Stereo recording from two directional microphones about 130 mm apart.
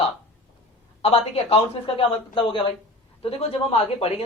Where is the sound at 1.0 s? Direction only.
50° left (ahead or behind).